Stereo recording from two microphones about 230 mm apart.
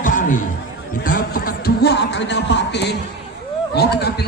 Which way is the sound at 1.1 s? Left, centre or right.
Left.